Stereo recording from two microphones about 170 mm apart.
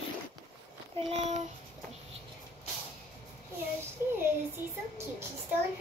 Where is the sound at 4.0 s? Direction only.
15° right (ahead or behind).